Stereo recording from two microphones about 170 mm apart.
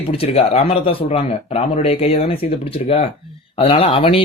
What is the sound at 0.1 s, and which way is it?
Speech, 35° left (ahead or behind).